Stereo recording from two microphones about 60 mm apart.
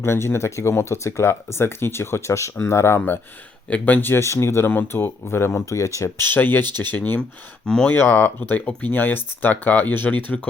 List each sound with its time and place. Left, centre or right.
0.0 s speech: left
3.7 s speech: left
4.1 s speech: left
4.6 s speech: left
6.0 s speech: left
7.6 s speech: centre
7.9 s speech: left